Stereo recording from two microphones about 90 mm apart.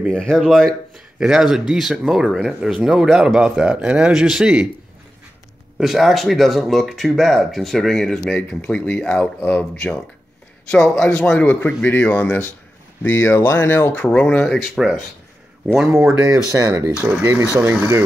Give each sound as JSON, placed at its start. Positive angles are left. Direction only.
{"t": 0.1, "sound": "speech", "side_deg": 10}
{"t": 5.8, "sound": "speech", "side_deg": 0}
{"t": 11.3, "sound": "speech", "side_deg": 20}
{"t": 13.0, "sound": "speech", "side_deg": 30}
{"t": 14.1, "sound": "speech", "side_deg": 15}
{"t": 14.6, "sound": "speech", "side_deg": -5}
{"t": 16.3, "sound": "speech", "side_deg": -35}